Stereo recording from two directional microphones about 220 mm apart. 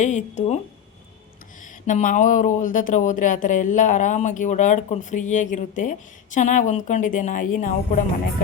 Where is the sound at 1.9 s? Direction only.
35° left (ahead or behind).